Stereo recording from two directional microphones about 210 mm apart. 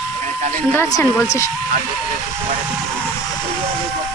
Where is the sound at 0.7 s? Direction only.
15° left (ahead or behind).